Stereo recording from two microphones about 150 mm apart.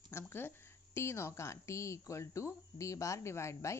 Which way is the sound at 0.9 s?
20° left (ahead or behind).